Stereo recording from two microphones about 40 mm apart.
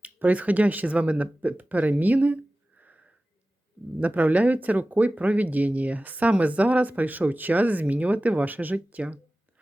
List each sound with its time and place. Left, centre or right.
0.0 s speech: right